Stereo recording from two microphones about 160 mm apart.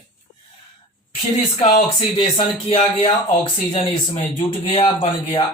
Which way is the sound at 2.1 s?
35° left (ahead or behind).